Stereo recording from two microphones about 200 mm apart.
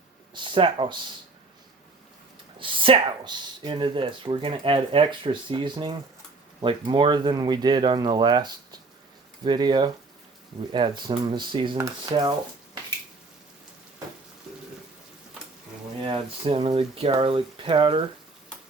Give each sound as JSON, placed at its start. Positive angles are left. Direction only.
{"t": 0.3, "sound": "speech", "side_deg": -25}
{"t": 2.6, "sound": "speech", "side_deg": -25}
{"t": 16.1, "sound": "speech", "side_deg": -30}